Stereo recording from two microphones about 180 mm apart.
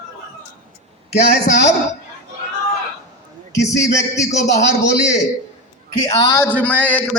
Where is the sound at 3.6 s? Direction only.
15° left (ahead or behind).